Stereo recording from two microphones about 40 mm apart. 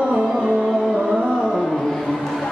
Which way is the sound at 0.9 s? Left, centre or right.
Centre.